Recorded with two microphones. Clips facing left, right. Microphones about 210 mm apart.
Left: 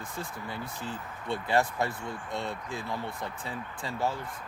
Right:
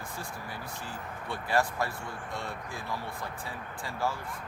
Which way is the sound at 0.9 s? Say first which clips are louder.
Left 5 dB; 20° left (ahead or behind).